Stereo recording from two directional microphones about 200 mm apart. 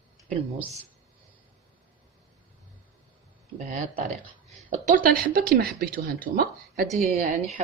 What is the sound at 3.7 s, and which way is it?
A woman's voice, 40° right (ahead or behind).